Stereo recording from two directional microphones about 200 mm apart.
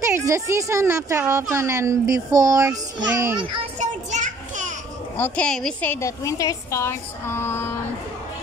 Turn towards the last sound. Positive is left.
turn(degrees=10)  # may be behind; listen again after turning